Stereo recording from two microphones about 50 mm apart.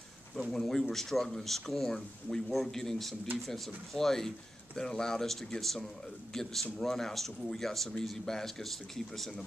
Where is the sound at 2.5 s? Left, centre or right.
Centre.